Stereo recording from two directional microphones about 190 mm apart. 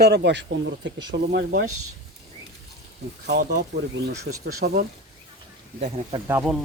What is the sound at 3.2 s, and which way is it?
Speech, 55° right (ahead or behind).